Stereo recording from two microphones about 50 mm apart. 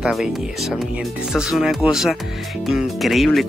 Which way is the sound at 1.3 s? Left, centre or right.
Centre.